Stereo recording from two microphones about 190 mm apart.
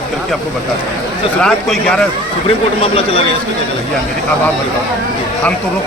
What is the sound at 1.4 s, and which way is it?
Speech, 5° left (ahead or behind).